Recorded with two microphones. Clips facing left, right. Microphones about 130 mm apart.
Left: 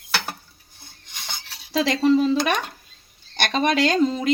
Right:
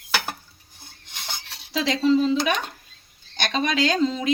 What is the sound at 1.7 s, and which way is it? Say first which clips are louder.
A woman's voice: left 2 dB; 60° left (ahead or behind).